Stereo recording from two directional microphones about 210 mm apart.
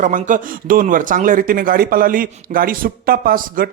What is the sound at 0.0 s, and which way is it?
Speech, 40° right (ahead or behind).